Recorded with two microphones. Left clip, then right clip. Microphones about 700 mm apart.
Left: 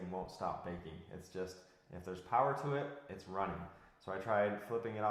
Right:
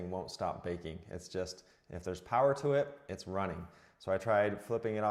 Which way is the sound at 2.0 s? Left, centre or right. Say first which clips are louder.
Right 4 dB; right.